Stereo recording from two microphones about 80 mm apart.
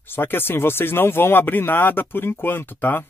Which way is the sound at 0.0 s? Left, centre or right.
Left.